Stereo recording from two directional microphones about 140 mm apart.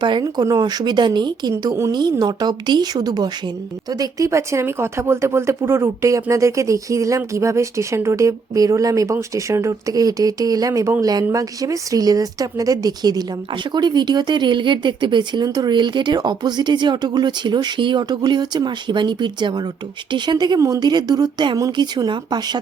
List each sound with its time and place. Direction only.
0.0 s speech: 35° right (ahead or behind)